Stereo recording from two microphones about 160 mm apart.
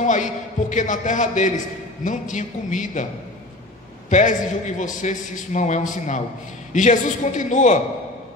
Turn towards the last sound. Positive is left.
turn(degrees=50)  # may be behind; listen again after turning